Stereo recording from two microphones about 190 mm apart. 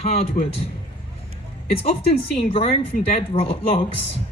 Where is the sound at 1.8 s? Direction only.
30° left (ahead or behind).